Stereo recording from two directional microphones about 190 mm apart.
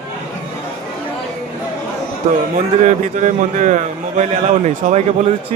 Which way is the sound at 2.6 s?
40° right (ahead or behind).